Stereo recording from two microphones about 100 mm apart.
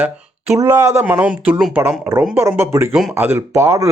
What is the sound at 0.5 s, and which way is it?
Speech, 35° right (ahead or behind).